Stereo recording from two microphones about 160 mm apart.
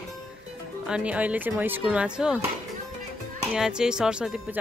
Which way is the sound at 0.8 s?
5° right (ahead or behind).